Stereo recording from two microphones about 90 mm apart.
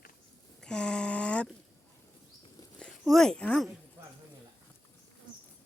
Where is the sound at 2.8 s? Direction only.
5° left (ahead or behind).